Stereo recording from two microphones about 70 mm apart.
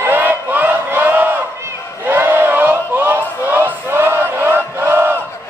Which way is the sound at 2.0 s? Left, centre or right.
Right.